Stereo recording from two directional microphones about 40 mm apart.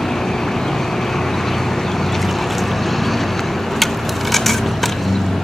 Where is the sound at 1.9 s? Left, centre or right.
Centre.